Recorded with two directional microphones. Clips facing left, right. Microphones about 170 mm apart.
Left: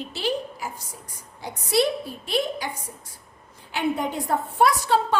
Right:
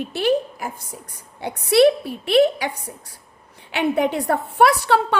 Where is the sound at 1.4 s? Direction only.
65° right (ahead or behind).